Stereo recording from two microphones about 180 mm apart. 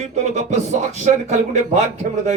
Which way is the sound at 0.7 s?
40° right (ahead or behind).